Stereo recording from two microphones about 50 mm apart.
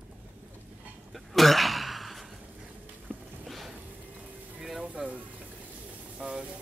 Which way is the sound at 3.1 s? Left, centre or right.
Right.